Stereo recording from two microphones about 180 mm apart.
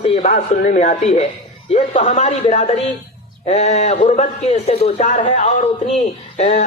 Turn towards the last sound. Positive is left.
turn(degrees=40)  # may be behind; listen again after turning